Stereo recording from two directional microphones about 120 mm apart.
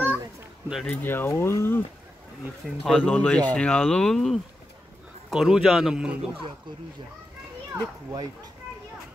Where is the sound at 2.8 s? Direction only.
5° left (ahead or behind).